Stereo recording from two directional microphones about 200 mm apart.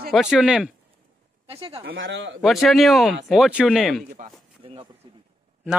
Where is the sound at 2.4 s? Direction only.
Centre (ahead or behind).